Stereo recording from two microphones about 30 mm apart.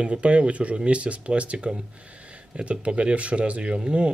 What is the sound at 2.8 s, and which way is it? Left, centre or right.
Speech, right.